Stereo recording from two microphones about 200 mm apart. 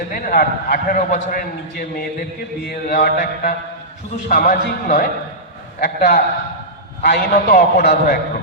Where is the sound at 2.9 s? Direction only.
45° left (ahead or behind).